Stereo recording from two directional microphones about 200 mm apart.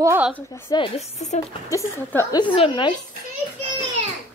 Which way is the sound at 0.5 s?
20° left (ahead or behind).